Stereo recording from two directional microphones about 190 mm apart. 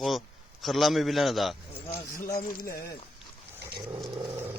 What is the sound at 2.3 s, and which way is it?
Speech, 55° left (ahead or behind).